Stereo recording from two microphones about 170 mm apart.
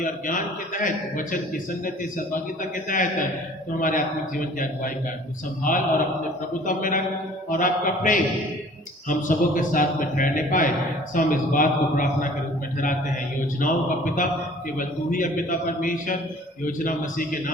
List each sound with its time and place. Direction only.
0.0 s a man's voice: 50° left (ahead or behind)
13.6 s a man's voice: 50° left (ahead or behind)